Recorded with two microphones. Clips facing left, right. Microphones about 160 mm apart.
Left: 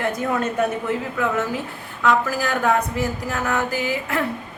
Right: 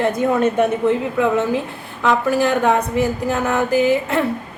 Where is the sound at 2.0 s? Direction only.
25° right (ahead or behind).